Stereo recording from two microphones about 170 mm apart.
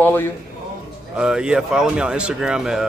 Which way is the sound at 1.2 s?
5° right (ahead or behind).